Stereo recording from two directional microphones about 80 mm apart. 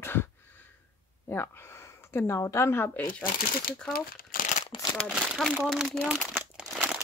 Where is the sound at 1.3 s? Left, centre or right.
Left.